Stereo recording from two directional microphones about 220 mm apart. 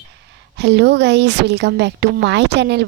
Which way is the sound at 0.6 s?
50° right (ahead or behind).